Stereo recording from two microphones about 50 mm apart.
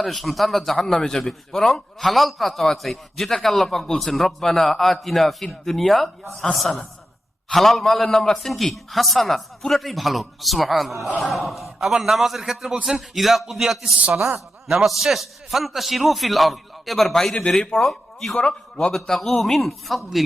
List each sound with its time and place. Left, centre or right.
0.0 s a man's voice: centre
17.6 s speech: left
17.8 s speech: centre
18.3 s a man's voice: centre